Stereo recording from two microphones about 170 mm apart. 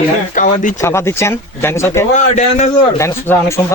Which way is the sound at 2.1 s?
45° left (ahead or behind).